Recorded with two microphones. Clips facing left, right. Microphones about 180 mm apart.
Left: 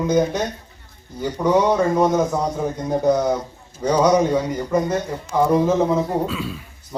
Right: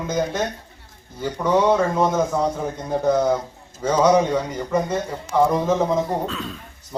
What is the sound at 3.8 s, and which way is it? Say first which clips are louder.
A man's voice: left 1 dB; 10° left (ahead or behind).